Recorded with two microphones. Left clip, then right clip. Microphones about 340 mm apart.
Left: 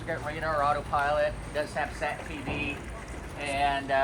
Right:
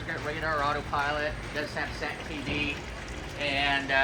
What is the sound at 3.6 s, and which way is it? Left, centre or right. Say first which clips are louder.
Speech: even; left.